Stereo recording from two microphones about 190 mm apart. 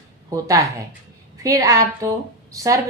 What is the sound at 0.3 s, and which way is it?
A woman's voice, 15° right (ahead or behind).